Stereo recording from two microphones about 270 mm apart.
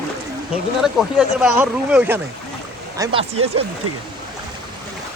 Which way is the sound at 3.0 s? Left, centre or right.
Centre.